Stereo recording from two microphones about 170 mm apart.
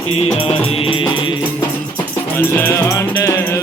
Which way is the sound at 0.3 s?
35° left (ahead or behind).